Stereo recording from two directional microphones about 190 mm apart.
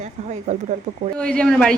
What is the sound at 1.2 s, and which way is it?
Speech, 5° left (ahead or behind).